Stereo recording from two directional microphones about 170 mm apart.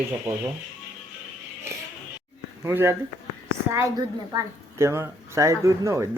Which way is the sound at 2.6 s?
15° right (ahead or behind).